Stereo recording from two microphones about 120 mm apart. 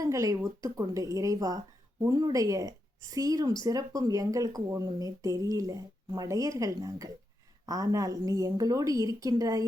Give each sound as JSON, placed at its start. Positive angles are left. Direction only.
{"t": 0.0, "sound": "speech", "side_deg": -30}